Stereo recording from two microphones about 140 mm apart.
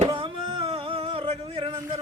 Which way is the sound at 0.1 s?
40° right (ahead or behind).